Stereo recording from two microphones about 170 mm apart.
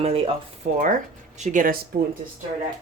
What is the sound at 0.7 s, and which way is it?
Speech, 50° right (ahead or behind).